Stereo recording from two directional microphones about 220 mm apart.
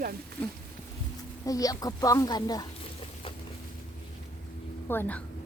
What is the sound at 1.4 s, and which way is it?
Speech, 15° left (ahead or behind).